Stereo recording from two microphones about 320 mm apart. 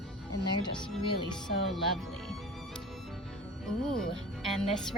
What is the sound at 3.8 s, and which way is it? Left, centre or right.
Speech, centre.